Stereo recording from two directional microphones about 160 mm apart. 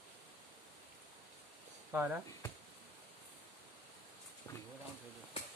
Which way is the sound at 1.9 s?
10° right (ahead or behind).